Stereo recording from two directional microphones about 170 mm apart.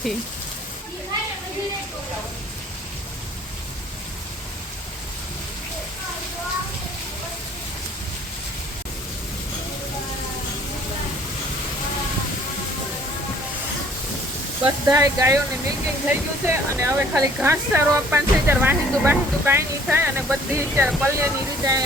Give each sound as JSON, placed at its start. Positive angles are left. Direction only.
{"t": 14.6, "sound": "speech", "side_deg": -20}